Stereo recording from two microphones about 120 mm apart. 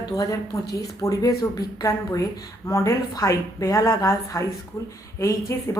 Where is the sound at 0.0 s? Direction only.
30° left (ahead or behind).